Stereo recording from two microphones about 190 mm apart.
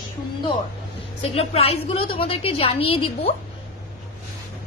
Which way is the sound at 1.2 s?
30° left (ahead or behind).